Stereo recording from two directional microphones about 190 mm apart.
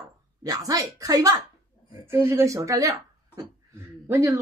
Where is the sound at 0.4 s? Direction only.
20° right (ahead or behind).